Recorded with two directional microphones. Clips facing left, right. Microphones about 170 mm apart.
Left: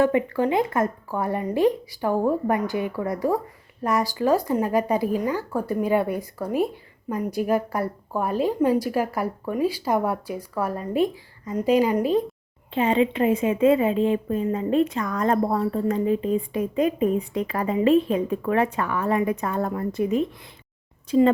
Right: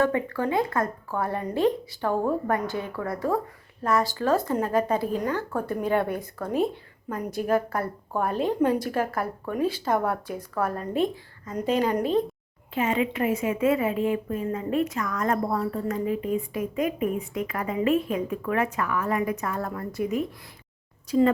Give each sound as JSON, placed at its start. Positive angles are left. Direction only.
{"t": 0.0, "sound": "a woman's voice", "side_deg": 15}
{"t": 12.7, "sound": "speech", "side_deg": 30}